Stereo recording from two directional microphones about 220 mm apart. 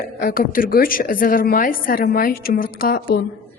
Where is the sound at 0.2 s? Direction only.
40° left (ahead or behind).